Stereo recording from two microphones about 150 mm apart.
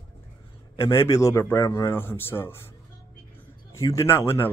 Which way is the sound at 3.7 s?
20° left (ahead or behind).